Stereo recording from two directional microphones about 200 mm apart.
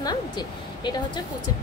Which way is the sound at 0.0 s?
20° left (ahead or behind).